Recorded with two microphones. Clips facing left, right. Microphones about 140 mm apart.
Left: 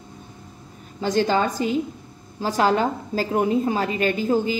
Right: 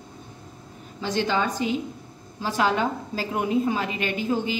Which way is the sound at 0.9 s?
40° left (ahead or behind).